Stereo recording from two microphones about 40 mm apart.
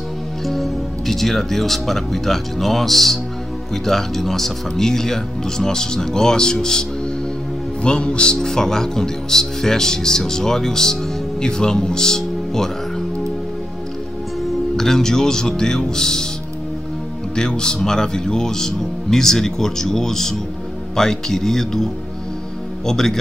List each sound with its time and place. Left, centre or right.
0.5 s a man's voice: centre; by 8.4 s left
8.4 s speech: centre
14.8 s speech: centre
17.4 s speech: centre